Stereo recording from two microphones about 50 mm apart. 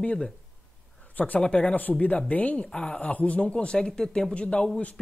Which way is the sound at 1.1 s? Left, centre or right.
Left.